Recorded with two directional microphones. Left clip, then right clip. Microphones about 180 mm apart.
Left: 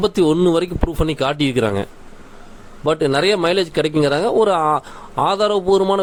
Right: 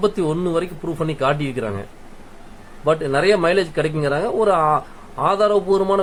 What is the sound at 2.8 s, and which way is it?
Speech, 55° left (ahead or behind).